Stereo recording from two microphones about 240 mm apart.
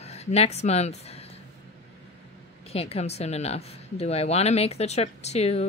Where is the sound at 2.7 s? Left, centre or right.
Left.